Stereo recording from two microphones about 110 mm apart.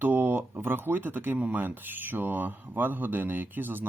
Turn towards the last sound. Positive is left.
turn(degrees=-20)  # may be behind; listen again after turning